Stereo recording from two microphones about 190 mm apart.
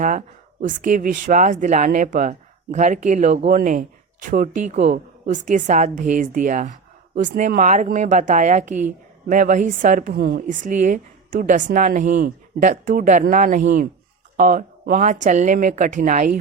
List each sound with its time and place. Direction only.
0.0 s a woman's voice: 40° right (ahead or behind)